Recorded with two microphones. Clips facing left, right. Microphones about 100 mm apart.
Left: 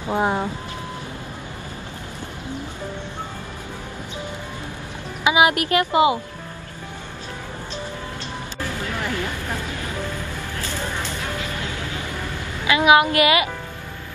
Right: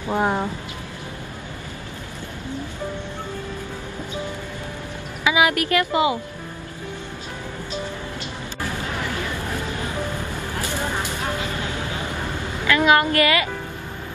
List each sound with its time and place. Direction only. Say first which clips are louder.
0.1 s a woman's voice: even; 15° left (ahead or behind)
5.2 s speech: left 2 dB; 25° left (ahead or behind)
10.5 s a sound: right 3 dB; 15° right (ahead or behind)
12.6 s a woman's voice: left 2 dB; 15° left (ahead or behind)